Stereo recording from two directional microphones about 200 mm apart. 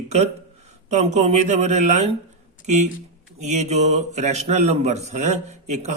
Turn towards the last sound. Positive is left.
turn(degrees=-35)  # may be behind; listen again after turning